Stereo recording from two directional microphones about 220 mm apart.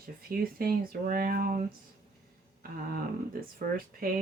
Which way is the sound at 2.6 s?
45° right (ahead or behind).